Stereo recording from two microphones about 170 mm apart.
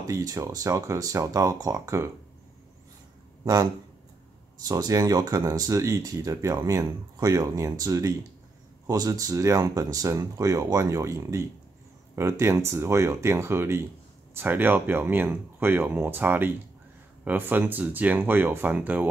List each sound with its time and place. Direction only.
0.0 s speech: 20° right (ahead or behind)
4.6 s speech: 20° right (ahead or behind)